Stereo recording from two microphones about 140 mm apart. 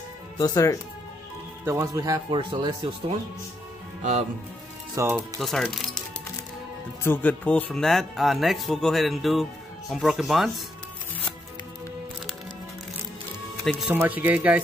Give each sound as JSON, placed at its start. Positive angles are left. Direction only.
{"t": 0.4, "sound": "speech", "side_deg": 25}
{"t": 1.6, "sound": "speech", "side_deg": -20}
{"t": 4.9, "sound": "speech", "side_deg": -20}
{"t": 5.4, "sound": "speech", "side_deg": 0}
{"t": 7.0, "sound": "speech", "side_deg": 15}
{"t": 13.8, "sound": "speech", "side_deg": -10}